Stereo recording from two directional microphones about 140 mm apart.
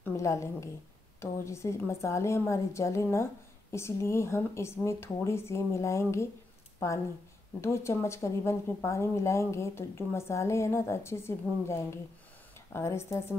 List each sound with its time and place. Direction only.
0.0 s speech: 20° left (ahead or behind)
7.6 s speech: 20° left (ahead or behind)